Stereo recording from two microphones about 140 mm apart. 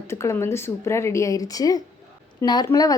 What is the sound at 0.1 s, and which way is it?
A woman's voice, 20° left (ahead or behind).